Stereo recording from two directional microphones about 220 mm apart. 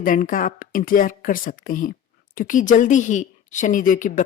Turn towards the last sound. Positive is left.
turn(degrees=35)  # may be behind; listen again after turning